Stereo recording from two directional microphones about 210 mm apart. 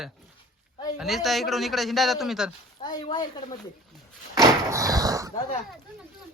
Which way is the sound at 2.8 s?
20° left (ahead or behind).